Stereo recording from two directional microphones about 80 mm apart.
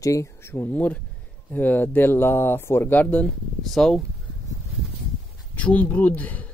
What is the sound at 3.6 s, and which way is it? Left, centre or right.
Speech, centre.